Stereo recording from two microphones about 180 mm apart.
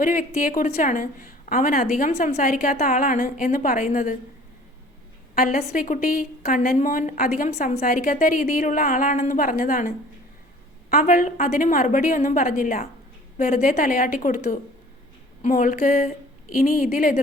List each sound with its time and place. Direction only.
0.0 s a woman's voice: 45° left (ahead or behind)
2.1 s a woman's voice: 40° left (ahead or behind)
5.3 s a woman's voice: 50° left (ahead or behind)